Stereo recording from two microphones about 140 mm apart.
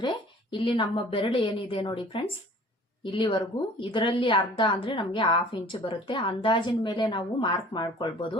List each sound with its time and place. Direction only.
0.5 s a woman's voice: 40° left (ahead or behind)